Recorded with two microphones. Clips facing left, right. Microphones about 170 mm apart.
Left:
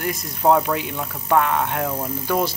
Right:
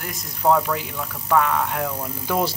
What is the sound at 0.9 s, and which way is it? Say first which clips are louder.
Speech: left 2 dB; 20° left (ahead or behind).